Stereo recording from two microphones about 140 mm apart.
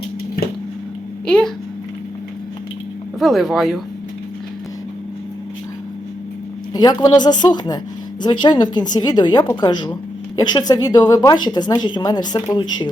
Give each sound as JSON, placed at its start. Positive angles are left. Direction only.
{"t": 1.3, "sound": "speech", "side_deg": 5}
{"t": 3.2, "sound": "speech", "side_deg": 0}
{"t": 6.7, "sound": "speech", "side_deg": 30}